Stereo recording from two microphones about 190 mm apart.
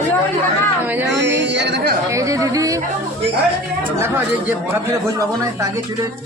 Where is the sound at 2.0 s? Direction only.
15° right (ahead or behind).